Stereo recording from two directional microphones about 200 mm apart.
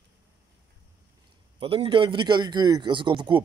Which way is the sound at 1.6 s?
25° right (ahead or behind).